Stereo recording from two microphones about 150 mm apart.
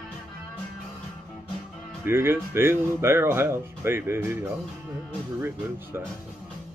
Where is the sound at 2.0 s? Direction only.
15° right (ahead or behind).